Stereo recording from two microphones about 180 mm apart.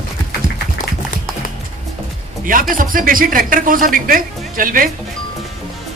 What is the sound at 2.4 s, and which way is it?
Speech, 50° right (ahead or behind).